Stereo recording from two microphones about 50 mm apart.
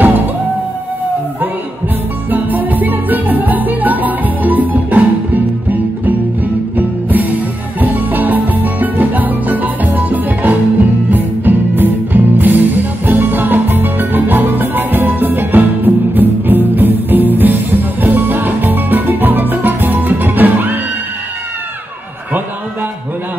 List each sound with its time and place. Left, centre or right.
2.3 s music: right